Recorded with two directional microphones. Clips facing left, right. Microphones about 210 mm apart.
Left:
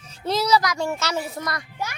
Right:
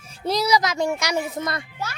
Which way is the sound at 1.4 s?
25° right (ahead or behind).